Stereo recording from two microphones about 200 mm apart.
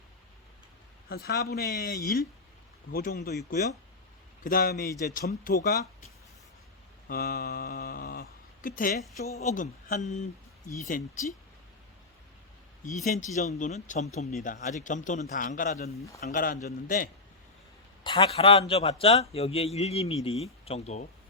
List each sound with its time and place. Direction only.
1.1 s speech: 50° left (ahead or behind)
7.1 s speech: 50° left (ahead or behind)
13.1 s speech: 40° left (ahead or behind)
18.0 s a man's voice: 25° left (ahead or behind)